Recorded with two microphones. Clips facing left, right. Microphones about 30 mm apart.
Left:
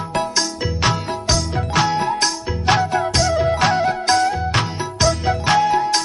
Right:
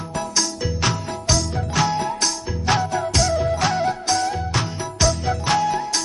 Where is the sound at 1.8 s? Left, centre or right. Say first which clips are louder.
Left 2 dB; left.